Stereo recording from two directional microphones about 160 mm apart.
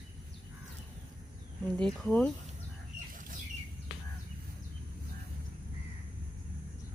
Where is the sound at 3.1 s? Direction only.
55° right (ahead or behind).